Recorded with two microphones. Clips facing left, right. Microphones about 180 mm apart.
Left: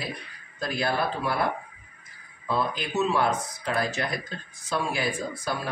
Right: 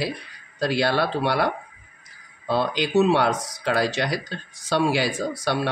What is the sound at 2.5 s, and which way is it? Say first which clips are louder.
Speech: right 6 dB; 80° right.